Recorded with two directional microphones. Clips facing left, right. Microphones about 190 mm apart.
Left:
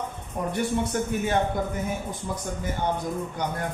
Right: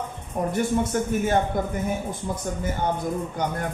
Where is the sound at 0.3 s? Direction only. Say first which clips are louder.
Right 3 dB; 55° right (ahead or behind).